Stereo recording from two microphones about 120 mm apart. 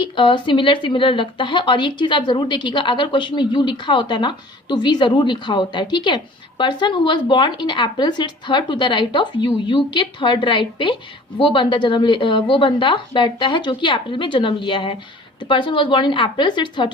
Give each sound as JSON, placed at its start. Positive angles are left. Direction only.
{"t": 0.0, "sound": "a woman's voice", "side_deg": 40}